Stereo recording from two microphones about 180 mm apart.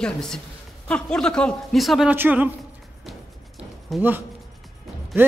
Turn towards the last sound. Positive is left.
turn(degrees=-10)  # may be behind; listen again after turning